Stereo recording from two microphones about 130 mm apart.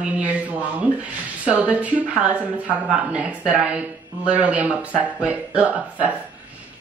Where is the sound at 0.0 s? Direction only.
10° right (ahead or behind).